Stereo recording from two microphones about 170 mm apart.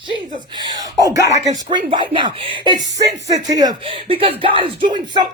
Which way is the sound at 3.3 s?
20° right (ahead or behind).